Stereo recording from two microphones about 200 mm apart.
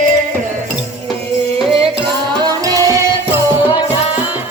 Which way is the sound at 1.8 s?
25° right (ahead or behind).